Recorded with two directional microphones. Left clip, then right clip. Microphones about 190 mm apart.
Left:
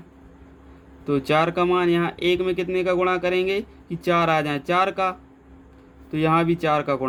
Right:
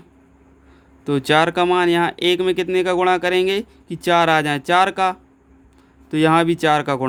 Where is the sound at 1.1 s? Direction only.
55° right (ahead or behind).